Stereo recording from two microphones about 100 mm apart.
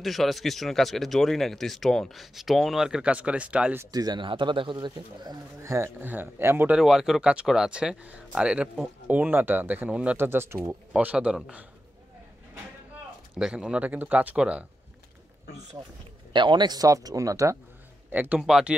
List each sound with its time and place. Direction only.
0.0 s speech: centre (ahead or behind)
3.9 s speech: 40° right (ahead or behind)
4.2 s speech: 55° right (ahead or behind)
5.6 s speech: 30° right (ahead or behind)
6.7 s speech: 5° right (ahead or behind)
10.1 s speech: 20° right (ahead or behind)
11.0 s speech: 15° right (ahead or behind)
13.4 s speech: 5° right (ahead or behind)
16.3 s speech: 50° right (ahead or behind); by 17.6 s 35° right (ahead or behind)
18.1 s speech: 15° right (ahead or behind)